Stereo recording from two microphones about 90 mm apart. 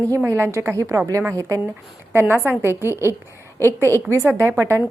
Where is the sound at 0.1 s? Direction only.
35° right (ahead or behind).